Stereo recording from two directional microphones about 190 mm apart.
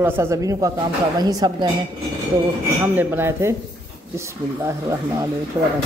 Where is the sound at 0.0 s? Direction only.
10° right (ahead or behind).